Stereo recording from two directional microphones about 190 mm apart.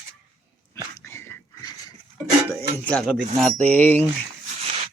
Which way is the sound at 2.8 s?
5° left (ahead or behind).